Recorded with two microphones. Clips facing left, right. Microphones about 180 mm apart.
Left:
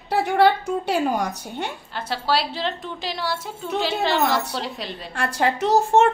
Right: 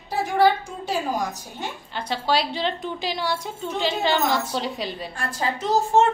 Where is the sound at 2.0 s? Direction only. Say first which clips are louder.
Even; 5° left (ahead or behind).